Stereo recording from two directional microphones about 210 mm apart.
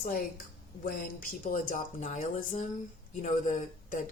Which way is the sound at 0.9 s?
40° left (ahead or behind).